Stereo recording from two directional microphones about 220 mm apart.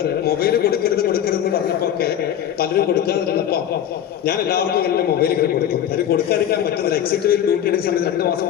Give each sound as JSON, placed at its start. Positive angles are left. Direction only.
{"t": 0.3, "sound": "a man's voice", "side_deg": 45}
{"t": 2.6, "sound": "a man's voice", "side_deg": 45}